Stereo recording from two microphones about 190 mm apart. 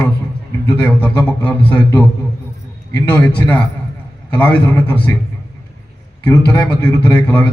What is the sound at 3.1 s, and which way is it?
A man's voice, 10° left (ahead or behind).